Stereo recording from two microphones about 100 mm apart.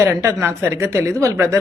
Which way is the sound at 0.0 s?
25° right (ahead or behind).